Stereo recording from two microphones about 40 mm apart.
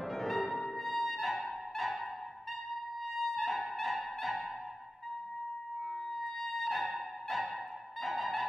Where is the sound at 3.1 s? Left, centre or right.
Centre.